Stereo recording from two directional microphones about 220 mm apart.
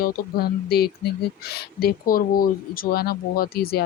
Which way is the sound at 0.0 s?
45° left (ahead or behind).